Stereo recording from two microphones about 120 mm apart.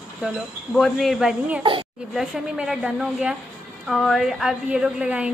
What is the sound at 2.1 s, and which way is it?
A woman's voice, 5° right (ahead or behind).